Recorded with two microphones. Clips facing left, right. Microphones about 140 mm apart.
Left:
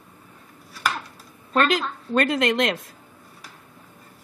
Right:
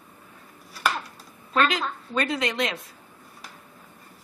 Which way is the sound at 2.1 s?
55° left (ahead or behind).